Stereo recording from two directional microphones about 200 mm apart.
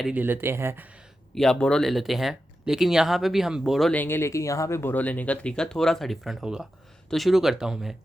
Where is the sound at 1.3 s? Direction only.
5° left (ahead or behind).